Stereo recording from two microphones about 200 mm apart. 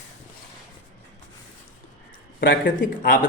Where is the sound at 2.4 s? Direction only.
50° left (ahead or behind).